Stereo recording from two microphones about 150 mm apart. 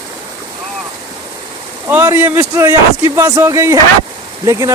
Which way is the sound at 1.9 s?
15° right (ahead or behind).